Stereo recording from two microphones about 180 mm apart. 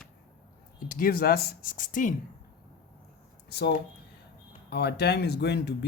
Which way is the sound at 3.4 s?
65° left (ahead or behind).